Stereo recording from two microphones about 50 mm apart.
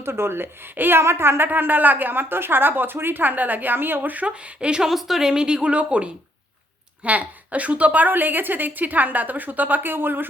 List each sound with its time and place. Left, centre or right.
0.0 s speech: right
1.5 s a woman's voice: right
4.1 s speech: right
4.8 s a woman's voice: centre; by 10.2 s right